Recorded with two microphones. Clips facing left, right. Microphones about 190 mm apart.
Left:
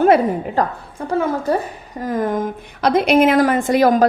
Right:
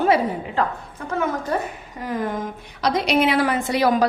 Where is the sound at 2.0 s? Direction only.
45° left (ahead or behind).